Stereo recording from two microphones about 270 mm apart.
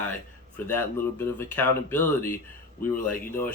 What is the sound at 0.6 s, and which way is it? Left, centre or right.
Speech, centre.